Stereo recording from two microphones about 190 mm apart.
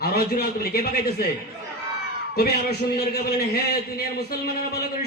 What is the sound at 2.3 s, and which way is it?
A man's voice, 55° left (ahead or behind).